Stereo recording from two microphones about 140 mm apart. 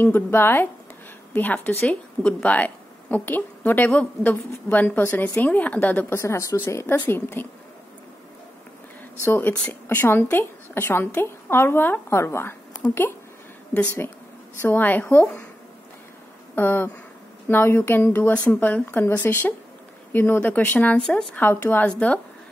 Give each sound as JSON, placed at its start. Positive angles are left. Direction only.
{"t": 0.0, "sound": "a woman's voice", "side_deg": 15}
{"t": 9.2, "sound": "a woman's voice", "side_deg": 15}
{"t": 13.7, "sound": "a woman's voice", "side_deg": 15}
{"t": 16.5, "sound": "a woman's voice", "side_deg": 15}